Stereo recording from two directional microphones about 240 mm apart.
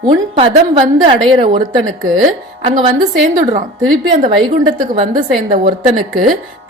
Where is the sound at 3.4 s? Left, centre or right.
Right.